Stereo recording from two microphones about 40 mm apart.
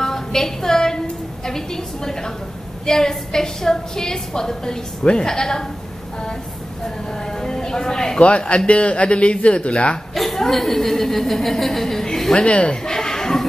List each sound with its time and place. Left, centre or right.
0.0 s music: centre
1.4 s a woman's voice: centre
7.3 s speech: centre
8.2 s speech: left
10.1 s chuckle: centre
10.4 s a woman's voice: centre
12.4 s speech: left
12.8 s a sound: centre